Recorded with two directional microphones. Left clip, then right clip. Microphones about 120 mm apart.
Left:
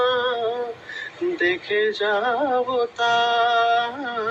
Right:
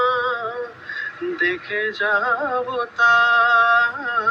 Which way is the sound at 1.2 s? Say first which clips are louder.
Left 1 dB; 25° left (ahead or behind).